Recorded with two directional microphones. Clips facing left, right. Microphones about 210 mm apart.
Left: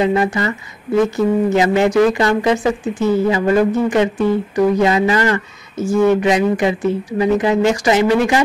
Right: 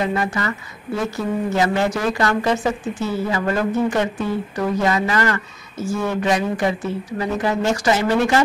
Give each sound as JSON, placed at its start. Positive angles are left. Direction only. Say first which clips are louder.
{"t": 0.0, "sound": "speech", "louder": "left 6 dB", "side_deg": 20}